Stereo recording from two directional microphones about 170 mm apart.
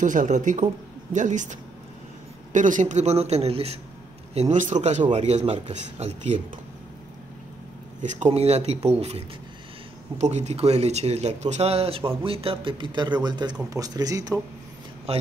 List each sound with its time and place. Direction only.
0.0 s a man's voice: 50° right (ahead or behind)
8.0 s speech: 40° right (ahead or behind)
12.0 s speech: 15° right (ahead or behind)
12.3 s speech: 35° right (ahead or behind)